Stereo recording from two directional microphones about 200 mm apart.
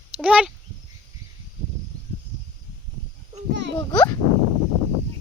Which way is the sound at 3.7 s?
20° left (ahead or behind).